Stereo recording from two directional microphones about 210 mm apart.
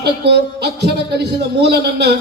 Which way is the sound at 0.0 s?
50° right (ahead or behind).